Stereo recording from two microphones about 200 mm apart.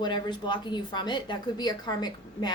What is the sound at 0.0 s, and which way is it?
Speech, 20° left (ahead or behind).